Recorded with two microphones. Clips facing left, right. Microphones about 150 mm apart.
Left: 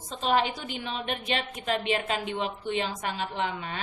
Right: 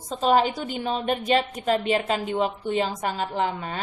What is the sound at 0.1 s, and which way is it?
A woman's voice, 40° right (ahead or behind).